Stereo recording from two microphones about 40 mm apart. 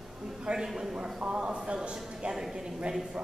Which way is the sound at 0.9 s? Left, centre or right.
Right.